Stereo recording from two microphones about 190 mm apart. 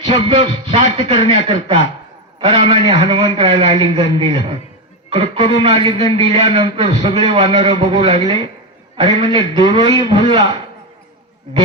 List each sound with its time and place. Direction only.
0.0 s a man's voice: 25° right (ahead or behind)
2.4 s a man's voice: 30° right (ahead or behind)